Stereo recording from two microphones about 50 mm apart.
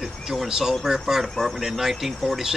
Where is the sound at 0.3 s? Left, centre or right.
Centre.